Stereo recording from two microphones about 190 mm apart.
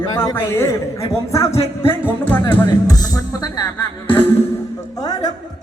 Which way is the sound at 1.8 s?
10° left (ahead or behind).